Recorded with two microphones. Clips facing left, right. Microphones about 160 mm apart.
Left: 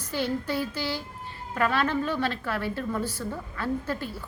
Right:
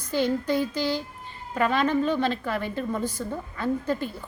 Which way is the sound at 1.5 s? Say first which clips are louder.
Right 3 dB; 15° right (ahead or behind).